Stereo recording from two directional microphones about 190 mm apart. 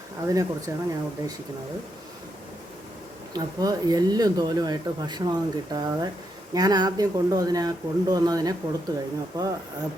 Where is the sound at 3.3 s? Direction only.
20° right (ahead or behind).